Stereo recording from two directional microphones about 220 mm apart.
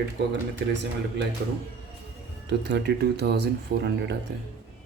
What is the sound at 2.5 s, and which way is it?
Speech, 50° right (ahead or behind).